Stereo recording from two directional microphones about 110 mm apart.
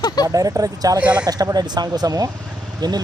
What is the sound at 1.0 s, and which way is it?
Speech, 10° right (ahead or behind).